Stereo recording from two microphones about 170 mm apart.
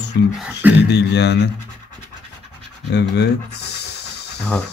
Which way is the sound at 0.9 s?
80° left.